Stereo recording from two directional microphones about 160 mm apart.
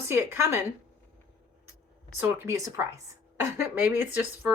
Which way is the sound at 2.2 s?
20° right (ahead or behind).